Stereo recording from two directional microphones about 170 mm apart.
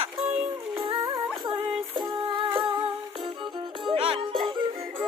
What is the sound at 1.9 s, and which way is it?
Music, 30° right (ahead or behind).